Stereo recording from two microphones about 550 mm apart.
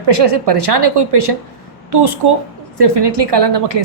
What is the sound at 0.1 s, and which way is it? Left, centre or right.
A woman's voice, right.